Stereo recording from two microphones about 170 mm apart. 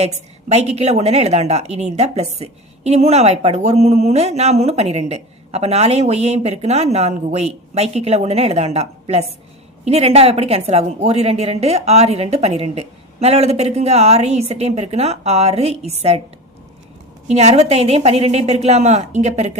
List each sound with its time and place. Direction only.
0.0 s a woman's voice: 40° right (ahead or behind)
17.2 s a woman's voice: 40° right (ahead or behind)